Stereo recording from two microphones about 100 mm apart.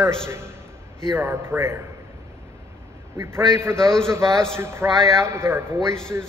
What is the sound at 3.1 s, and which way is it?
A man's voice, 30° right (ahead or behind).